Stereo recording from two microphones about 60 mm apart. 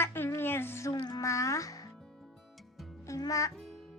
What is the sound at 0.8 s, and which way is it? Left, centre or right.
Music, left.